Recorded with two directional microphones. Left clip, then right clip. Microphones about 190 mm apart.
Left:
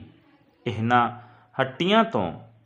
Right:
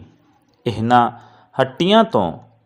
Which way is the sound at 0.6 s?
25° right (ahead or behind).